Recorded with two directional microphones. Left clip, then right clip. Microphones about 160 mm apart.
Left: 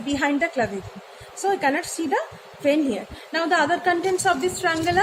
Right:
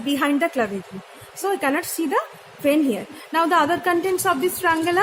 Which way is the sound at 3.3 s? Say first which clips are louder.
Right 2 dB; 50° right (ahead or behind).